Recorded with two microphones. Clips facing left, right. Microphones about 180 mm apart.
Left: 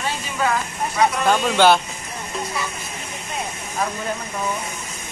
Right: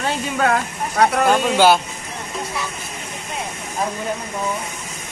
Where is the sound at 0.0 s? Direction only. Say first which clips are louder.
Right 4 dB; 60° right (ahead or behind).